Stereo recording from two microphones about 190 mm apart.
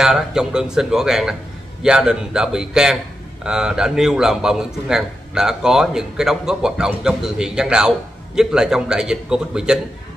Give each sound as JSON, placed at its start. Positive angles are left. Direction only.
{"t": 0.0, "sound": "a man's voice", "side_deg": -5}